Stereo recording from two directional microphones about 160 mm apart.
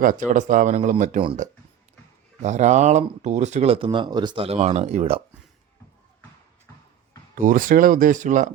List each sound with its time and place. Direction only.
0.0 s speech: 55° right (ahead or behind)
2.4 s speech: 45° right (ahead or behind)
7.3 s speech: 55° right (ahead or behind)